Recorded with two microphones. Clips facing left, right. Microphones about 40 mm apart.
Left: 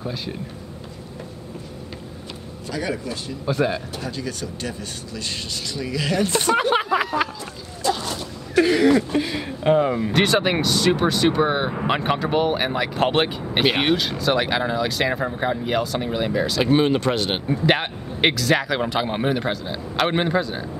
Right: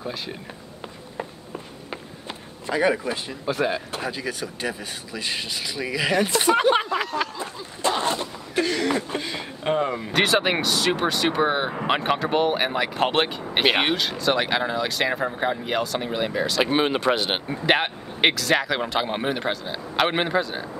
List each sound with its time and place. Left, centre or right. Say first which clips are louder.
0.0 s speech: left 2 dB; centre
2.6 s speech: right 5 dB; right
3.4 s speech: left 2 dB; centre
6.9 s a sound: left 4 dB; centre
7.3 s speech: right 2 dB; right
8.5 s a sound: left 7 dB; centre
8.9 s speech: left 6 dB; centre
16.6 s speech: left 4 dB; centre